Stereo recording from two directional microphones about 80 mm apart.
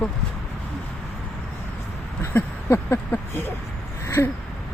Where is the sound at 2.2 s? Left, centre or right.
Left.